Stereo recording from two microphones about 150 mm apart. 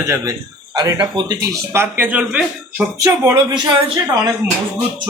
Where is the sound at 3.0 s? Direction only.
20° right (ahead or behind).